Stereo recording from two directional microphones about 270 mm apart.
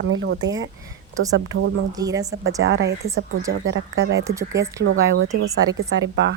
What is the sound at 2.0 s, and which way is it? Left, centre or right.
Speech, centre.